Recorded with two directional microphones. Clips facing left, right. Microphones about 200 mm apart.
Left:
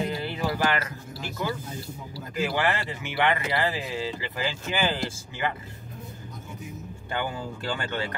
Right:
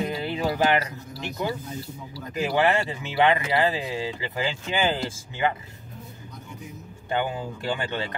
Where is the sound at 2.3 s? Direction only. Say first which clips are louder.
Right 4 dB; 20° right (ahead or behind).